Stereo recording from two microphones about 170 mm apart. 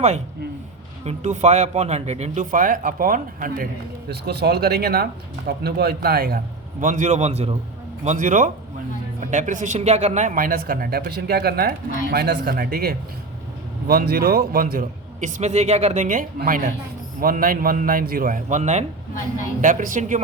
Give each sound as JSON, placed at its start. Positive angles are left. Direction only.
{"t": 1.0, "sound": "speech", "side_deg": -40}
{"t": 4.1, "sound": "a man's voice", "side_deg": -70}